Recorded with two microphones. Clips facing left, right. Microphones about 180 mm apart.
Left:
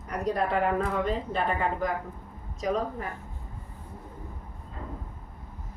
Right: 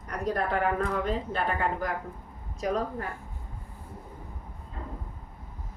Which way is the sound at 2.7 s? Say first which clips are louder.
Left 1 dB; centre (ahead or behind).